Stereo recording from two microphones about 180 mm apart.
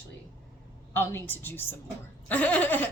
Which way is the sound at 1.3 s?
10° left (ahead or behind).